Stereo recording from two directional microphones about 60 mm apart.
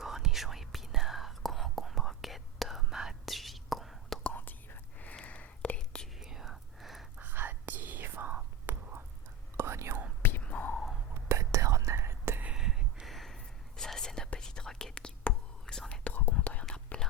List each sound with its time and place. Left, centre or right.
0.0 s whispering: centre
4.4 s whispering: left; by 6.1 s centre
6.1 s whispering: centre
7.2 s whispering: right
9.6 s whispering: right
10.4 s whispering: left
11.1 s whispering: right
12.5 s a sound: centre
13.1 s whispering: centre
16.0 s whispering: left